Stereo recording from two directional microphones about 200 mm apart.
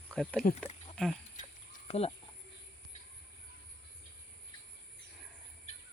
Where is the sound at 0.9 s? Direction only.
5° left (ahead or behind).